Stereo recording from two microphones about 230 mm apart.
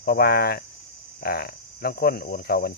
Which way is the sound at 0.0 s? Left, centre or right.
Left.